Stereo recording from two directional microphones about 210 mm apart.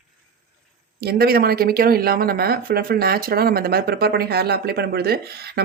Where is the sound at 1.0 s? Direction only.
45° right (ahead or behind).